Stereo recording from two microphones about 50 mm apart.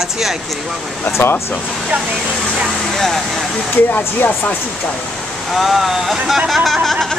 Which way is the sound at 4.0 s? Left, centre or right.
Left.